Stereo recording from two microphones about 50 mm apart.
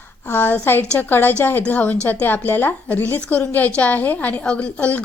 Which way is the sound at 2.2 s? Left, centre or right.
Left.